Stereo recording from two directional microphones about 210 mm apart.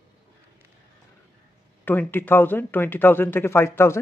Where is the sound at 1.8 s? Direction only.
10° left (ahead or behind).